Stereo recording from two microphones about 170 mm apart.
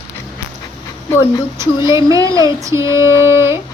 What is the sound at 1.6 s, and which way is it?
Speech, 15° right (ahead or behind).